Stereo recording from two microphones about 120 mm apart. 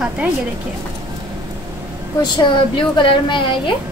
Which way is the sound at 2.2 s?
40° left (ahead or behind).